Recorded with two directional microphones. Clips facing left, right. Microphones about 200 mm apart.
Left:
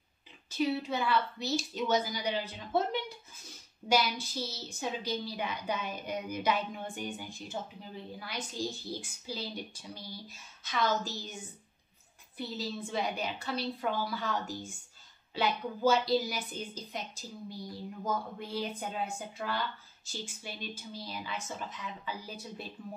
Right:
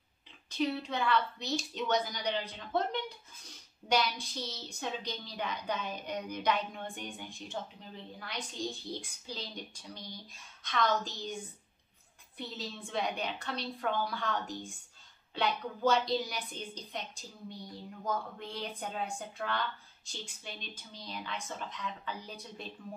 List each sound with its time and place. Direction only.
0.5 s a woman's voice: 5° left (ahead or behind)